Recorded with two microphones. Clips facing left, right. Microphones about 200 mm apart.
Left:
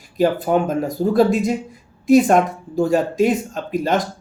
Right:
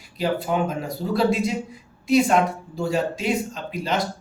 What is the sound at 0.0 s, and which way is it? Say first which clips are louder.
Speech: left 7 dB; 45° left (ahead or behind).